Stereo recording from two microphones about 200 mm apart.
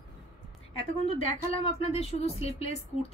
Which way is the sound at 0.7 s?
30° left (ahead or behind).